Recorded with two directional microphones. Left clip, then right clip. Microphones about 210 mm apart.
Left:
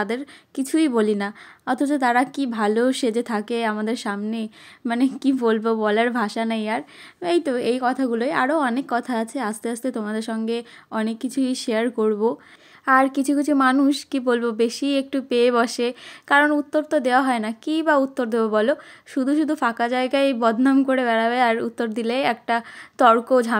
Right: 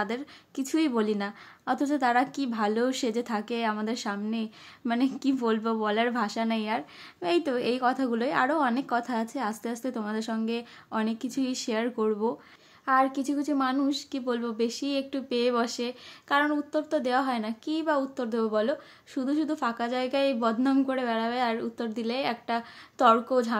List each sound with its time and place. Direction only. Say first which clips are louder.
0.0 s a woman's voice: left 6 dB; 25° left (ahead or behind)